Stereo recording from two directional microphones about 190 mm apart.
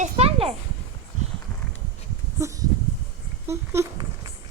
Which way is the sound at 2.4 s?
15° right (ahead or behind).